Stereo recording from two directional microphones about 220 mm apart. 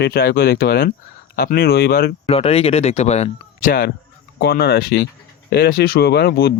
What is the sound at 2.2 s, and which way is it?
Speech, 25° left (ahead or behind).